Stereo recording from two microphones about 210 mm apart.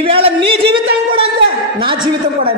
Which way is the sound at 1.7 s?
25° right (ahead or behind).